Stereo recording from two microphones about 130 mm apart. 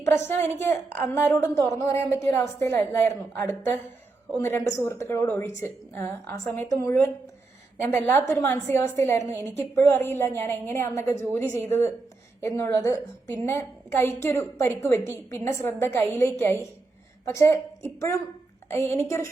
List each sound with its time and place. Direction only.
0.2 s a woman's voice: 20° left (ahead or behind)
5.2 s a woman's voice: 10° left (ahead or behind)